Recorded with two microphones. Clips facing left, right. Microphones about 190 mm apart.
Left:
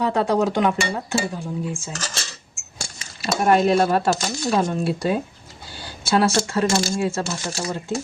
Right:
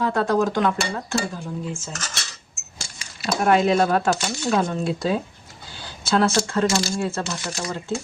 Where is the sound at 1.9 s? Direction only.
30° left (ahead or behind).